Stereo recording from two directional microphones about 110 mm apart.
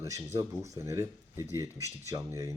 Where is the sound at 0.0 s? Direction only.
25° right (ahead or behind).